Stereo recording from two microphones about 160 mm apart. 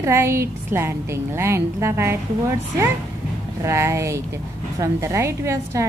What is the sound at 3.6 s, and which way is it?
A woman's voice, 20° right (ahead or behind).